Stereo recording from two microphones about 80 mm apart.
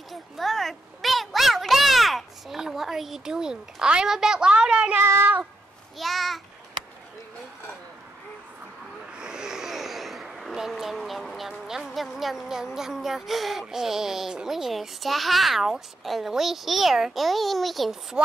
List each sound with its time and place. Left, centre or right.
0.1 s a sound: centre
4.9 s child singing: right
5.9 s speech: centre
9.1 s speech: centre
18.2 s chopping: centre